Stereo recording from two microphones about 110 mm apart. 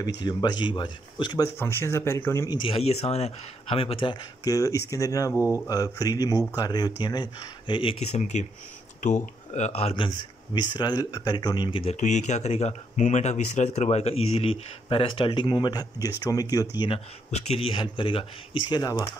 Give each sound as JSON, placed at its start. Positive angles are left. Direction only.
{"t": 0.0, "sound": "speech", "side_deg": 40}
{"t": 1.6, "sound": "speech", "side_deg": 20}
{"t": 2.6, "sound": "speech", "side_deg": 65}
{"t": 4.5, "sound": "speech", "side_deg": 30}
{"t": 9.5, "sound": "speech", "side_deg": 80}
{"t": 10.5, "sound": "speech", "side_deg": 40}
{"t": 11.8, "sound": "speech", "side_deg": 85}
{"t": 17.3, "sound": "speech", "side_deg": 90}
{"t": 17.6, "sound": "speech", "side_deg": 50}
{"t": 18.8, "sound": "speech", "side_deg": 35}